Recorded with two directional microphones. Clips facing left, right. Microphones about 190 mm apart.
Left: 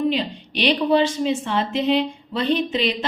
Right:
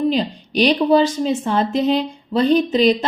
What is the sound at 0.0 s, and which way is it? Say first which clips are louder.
A woman's voice: right 3 dB; 40° right (ahead or behind).